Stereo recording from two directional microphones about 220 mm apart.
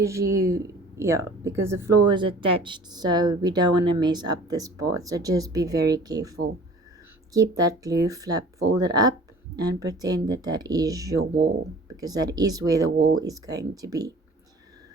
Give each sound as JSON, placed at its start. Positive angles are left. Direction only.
{"t": 0.0, "sound": "speech", "side_deg": -15}